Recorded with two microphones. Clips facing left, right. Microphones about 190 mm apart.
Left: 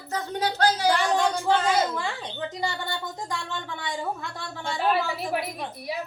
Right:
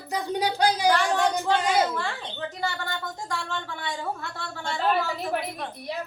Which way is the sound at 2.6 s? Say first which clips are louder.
Even; 15° left (ahead or behind).